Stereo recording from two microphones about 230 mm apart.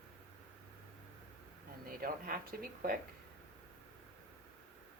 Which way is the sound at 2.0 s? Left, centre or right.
Right.